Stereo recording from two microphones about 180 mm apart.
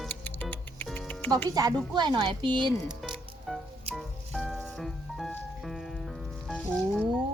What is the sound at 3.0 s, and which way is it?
Music, centre (ahead or behind).